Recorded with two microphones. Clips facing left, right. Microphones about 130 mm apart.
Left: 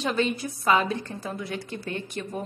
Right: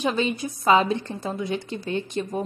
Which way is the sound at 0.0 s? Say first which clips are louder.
Right 2 dB; 20° right (ahead or behind).